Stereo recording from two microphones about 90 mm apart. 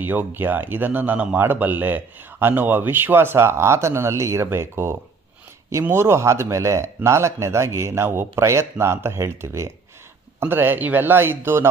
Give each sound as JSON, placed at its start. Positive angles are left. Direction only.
{"t": 0.0, "sound": "a man's voice", "side_deg": -20}